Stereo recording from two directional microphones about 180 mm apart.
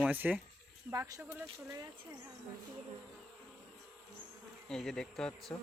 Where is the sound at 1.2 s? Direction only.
5° right (ahead or behind).